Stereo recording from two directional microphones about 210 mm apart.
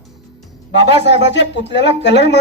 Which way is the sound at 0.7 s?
55° left (ahead or behind).